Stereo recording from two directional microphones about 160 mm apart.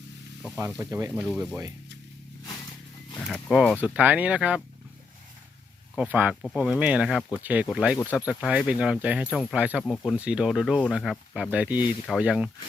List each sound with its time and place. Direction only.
0.8 s speech: 15° right (ahead or behind)
1.2 s speech: 5° right (ahead or behind)
3.2 s speech: 5° left (ahead or behind)
6.0 s speech: 10° right (ahead or behind)
6.4 s speech: 5° left (ahead or behind)
6.7 s speech: 10° right (ahead or behind)
9.3 s speech: 5° left (ahead or behind)
9.6 s speech: 10° right (ahead or behind)
9.8 s speech: 5° left (ahead or behind)
10.2 s speech: 5° right (ahead or behind)